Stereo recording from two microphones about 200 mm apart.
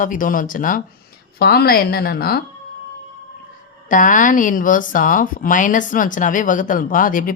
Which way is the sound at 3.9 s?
40° left (ahead or behind).